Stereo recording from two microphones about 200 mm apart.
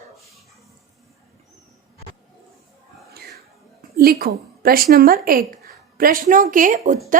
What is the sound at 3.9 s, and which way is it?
A woman's voice, 50° right (ahead or behind).